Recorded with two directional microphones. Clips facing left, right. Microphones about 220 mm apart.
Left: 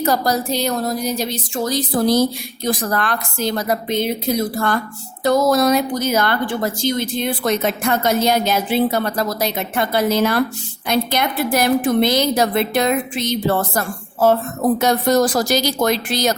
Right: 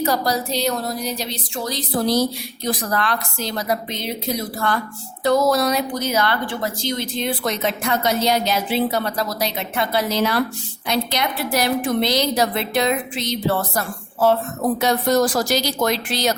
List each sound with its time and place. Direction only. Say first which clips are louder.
0.0 s a woman's voice: left 2 dB; 50° left (ahead or behind)